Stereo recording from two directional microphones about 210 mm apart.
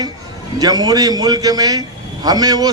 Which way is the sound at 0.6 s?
20° right (ahead or behind).